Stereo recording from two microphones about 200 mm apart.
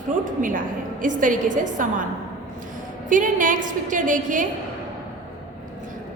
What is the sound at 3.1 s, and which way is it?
A woman's voice, 40° right (ahead or behind).